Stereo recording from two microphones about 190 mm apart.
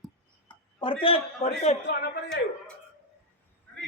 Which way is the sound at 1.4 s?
30° left (ahead or behind).